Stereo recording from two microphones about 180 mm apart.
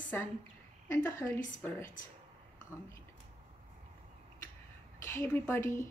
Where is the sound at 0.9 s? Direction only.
10° left (ahead or behind).